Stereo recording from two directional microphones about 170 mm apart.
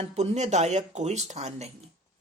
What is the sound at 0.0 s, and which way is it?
Speech, 40° right (ahead or behind).